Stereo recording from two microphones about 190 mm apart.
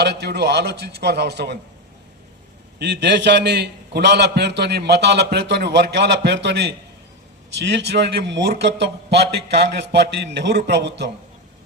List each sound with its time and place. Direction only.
0.0 s a man's voice: 60° right (ahead or behind)
2.7 s a man's voice: 60° right (ahead or behind)